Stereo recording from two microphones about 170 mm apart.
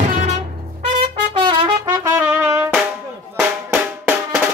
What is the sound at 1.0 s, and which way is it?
Trumpet, 30° right (ahead or behind).